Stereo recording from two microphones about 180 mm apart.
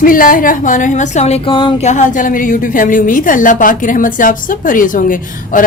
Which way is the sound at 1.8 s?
40° left (ahead or behind).